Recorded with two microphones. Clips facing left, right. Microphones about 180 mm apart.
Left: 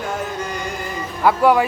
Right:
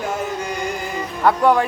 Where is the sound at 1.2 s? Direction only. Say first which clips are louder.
Left 1 dB; 5° left (ahead or behind).